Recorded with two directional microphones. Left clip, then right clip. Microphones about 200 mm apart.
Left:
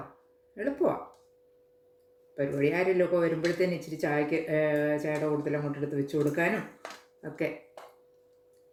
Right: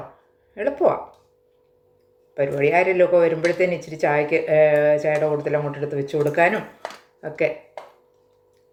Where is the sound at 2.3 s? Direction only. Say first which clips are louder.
Right 10 dB; 20° left (ahead or behind).